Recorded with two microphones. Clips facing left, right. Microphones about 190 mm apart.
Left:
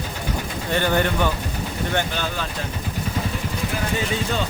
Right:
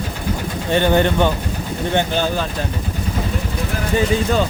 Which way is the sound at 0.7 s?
20° right (ahead or behind).